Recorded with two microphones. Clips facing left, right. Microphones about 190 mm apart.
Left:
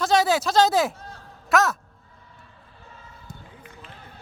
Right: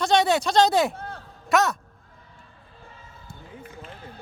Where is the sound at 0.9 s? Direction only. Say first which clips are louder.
Right 6 dB; 60° right (ahead or behind).